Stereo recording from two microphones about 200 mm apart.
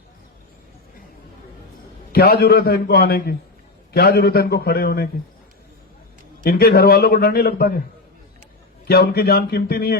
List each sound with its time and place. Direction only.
2.1 s a man's voice: 50° left (ahead or behind)
6.4 s a man's voice: 50° left (ahead or behind)
8.9 s a man's voice: 50° left (ahead or behind)